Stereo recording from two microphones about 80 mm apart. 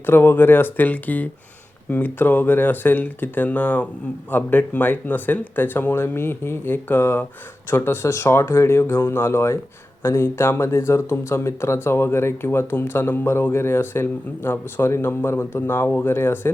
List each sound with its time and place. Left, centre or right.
0.0 s speech: left